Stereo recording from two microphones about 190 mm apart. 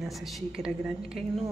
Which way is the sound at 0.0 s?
Centre (ahead or behind).